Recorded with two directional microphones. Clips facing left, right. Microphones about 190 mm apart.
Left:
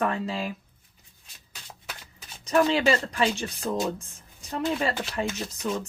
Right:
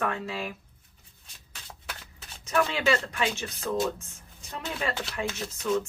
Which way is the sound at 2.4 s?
35° left (ahead or behind).